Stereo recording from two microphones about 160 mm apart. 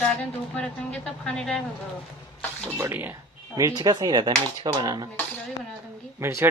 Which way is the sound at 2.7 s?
15° right (ahead or behind).